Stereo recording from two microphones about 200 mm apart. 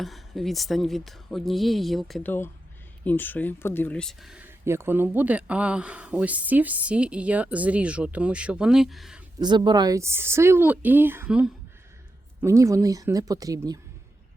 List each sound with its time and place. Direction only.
0.0 s speech: centre (ahead or behind)
9.4 s speech: 20° right (ahead or behind)